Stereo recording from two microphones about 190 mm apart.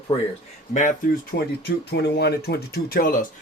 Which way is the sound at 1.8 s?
60° left (ahead or behind).